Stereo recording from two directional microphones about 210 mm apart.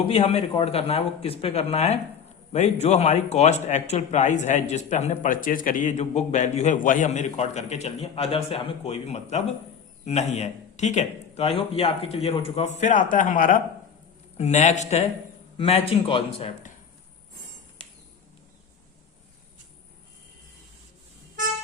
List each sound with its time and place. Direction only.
0.1 s speech: 30° left (ahead or behind)